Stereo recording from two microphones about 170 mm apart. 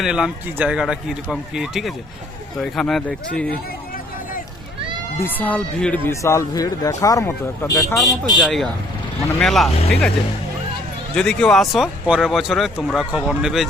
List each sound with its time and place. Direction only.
0.0 s speech: 5° right (ahead or behind)
3.9 s a sound: 55° left (ahead or behind)
5.2 s speech: 10° left (ahead or behind)
8.4 s speech: centre (ahead or behind)
11.1 s speech: 5° left (ahead or behind)